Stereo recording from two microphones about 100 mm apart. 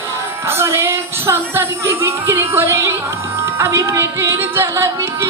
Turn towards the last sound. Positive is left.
turn(degrees=-30)  # may be behind; listen again after turning